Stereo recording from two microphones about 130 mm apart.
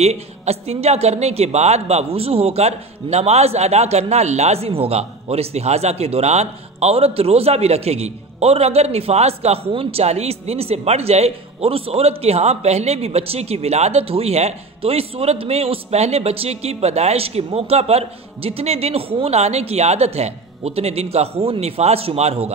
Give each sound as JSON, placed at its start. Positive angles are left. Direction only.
{"t": 0.0, "sound": "a woman's voice", "side_deg": -55}